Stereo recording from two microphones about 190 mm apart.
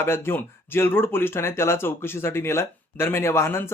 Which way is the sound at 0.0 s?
10° left (ahead or behind).